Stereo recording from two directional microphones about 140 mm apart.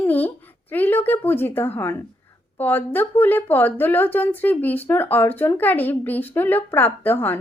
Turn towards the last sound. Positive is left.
turn(degrees=15)  # may be behind; listen again after turning